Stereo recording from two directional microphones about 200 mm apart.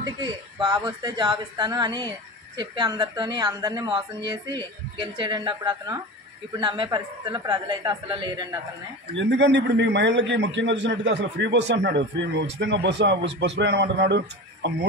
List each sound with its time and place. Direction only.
0.0 s speech: 20° right (ahead or behind)
9.1 s a man's voice: 65° right (ahead or behind)